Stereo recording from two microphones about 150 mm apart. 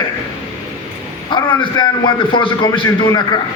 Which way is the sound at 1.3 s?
30° left (ahead or behind).